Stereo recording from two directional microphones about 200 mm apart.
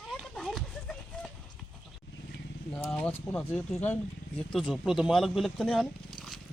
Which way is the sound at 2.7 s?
10° left (ahead or behind).